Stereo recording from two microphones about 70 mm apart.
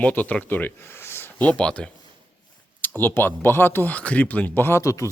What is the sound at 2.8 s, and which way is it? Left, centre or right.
Speech, left.